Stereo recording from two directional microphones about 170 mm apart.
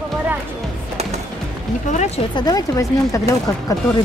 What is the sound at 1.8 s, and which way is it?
Speech, 45° left (ahead or behind).